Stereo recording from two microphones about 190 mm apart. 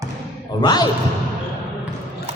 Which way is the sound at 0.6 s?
20° left (ahead or behind).